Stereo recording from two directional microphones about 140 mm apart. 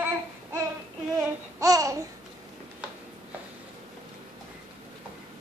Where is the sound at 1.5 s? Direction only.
25° right (ahead or behind).